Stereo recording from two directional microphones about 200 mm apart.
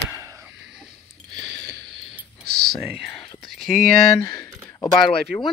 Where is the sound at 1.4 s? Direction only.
60° right (ahead or behind).